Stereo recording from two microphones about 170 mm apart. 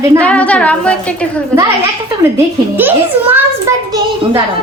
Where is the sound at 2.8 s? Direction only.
10° right (ahead or behind).